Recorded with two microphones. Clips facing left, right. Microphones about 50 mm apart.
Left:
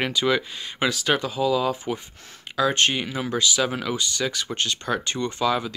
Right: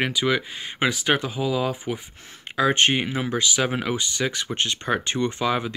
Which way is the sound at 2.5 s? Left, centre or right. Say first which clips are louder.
Right 2 dB; right.